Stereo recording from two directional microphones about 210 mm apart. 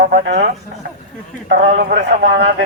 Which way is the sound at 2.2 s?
60° right (ahead or behind).